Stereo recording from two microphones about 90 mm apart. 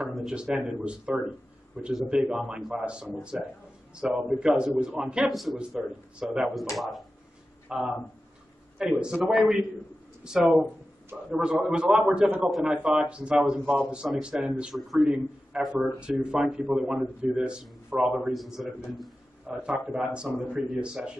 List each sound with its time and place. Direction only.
0.3 s speech: 10° right (ahead or behind)
5.3 s a man's voice: centre (ahead or behind)
7.6 s a man's voice: 10° right (ahead or behind)
10.6 s a sound: 25° right (ahead or behind)
11.3 s a man's voice: 10° right (ahead or behind)